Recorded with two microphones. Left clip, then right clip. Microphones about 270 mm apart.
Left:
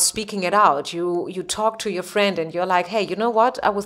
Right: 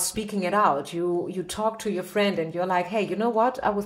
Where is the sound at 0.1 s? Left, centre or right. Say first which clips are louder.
Left 5 dB; left.